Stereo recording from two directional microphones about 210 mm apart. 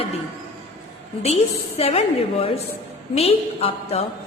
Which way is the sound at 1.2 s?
30° left (ahead or behind).